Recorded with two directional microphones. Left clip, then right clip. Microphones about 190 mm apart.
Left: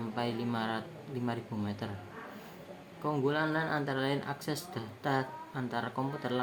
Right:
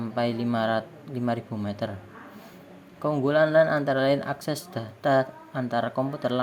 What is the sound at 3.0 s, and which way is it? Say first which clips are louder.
A man's voice: right 9 dB; 40° right (ahead or behind).